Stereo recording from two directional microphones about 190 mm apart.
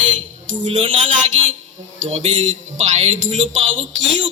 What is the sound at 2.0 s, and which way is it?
Music, 35° right (ahead or behind).